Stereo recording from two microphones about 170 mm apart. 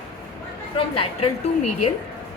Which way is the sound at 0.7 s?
30° left (ahead or behind).